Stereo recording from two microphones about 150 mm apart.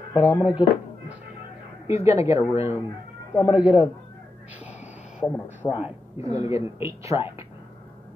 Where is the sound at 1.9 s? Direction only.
20° right (ahead or behind).